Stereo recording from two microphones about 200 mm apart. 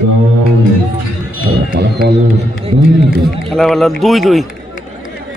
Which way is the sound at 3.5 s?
Centre (ahead or behind).